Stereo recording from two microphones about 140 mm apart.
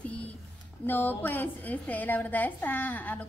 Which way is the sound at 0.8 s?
15° left (ahead or behind).